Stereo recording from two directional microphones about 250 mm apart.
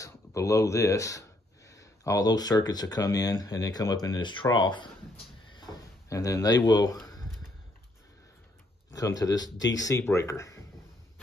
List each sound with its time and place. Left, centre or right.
0.0 s speech: centre
8.9 s speech: centre